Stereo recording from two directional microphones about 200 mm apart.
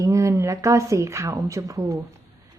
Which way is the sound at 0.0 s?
15° right (ahead or behind).